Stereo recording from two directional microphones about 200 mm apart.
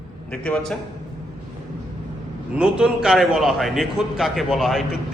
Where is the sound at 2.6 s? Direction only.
5° right (ahead or behind).